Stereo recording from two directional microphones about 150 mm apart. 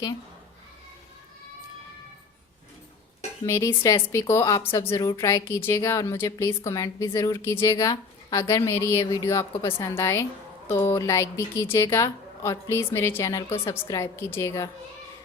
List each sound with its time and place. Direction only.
3.4 s a woman's voice: 20° left (ahead or behind)